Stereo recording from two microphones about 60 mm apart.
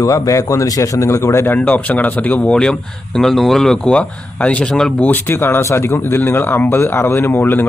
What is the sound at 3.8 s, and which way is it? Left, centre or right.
Speech, left.